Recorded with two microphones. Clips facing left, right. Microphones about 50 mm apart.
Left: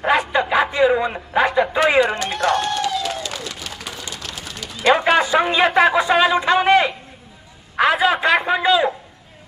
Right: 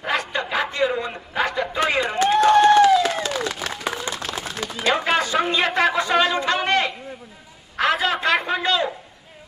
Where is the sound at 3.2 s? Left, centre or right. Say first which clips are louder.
Right 4 dB; right.